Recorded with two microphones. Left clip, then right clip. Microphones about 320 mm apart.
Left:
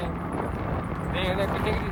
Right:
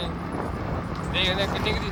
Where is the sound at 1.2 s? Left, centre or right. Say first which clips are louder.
Right 3 dB; centre.